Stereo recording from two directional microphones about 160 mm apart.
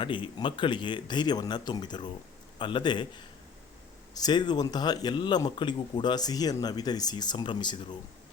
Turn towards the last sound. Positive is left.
turn(degrees=30)  # may be behind; listen again after turning